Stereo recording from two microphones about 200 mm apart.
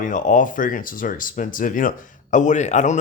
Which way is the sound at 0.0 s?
40° left (ahead or behind).